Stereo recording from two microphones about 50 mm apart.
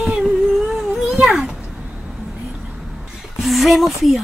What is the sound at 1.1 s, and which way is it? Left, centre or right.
Speech, centre.